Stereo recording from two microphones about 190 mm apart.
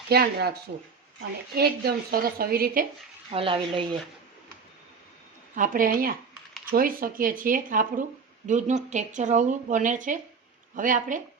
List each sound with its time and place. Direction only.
0.1 s speech: 55° right (ahead or behind)
1.5 s speech: 55° right (ahead or behind)
3.3 s speech: 25° right (ahead or behind)
5.5 s a woman's voice: 45° right (ahead or behind)